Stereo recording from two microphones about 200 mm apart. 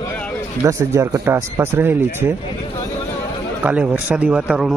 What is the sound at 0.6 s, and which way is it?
Speech, 15° right (ahead or behind).